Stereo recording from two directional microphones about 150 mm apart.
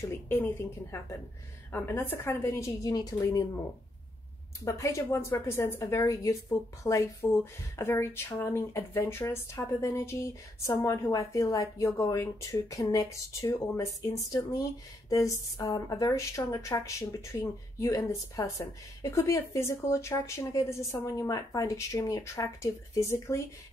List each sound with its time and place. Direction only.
0.0 s a woman's voice: 15° left (ahead or behind)
4.6 s speech: 20° left (ahead or behind)